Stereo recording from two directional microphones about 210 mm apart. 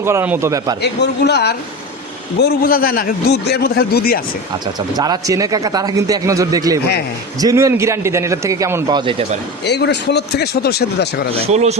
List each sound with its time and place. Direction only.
0.0 s a man's voice: 10° right (ahead or behind)
0.8 s a man's voice: 50° left (ahead or behind)
4.9 s a man's voice: 20° right (ahead or behind)
9.6 s a man's voice: 55° left (ahead or behind)
11.4 s speech: 30° right (ahead or behind)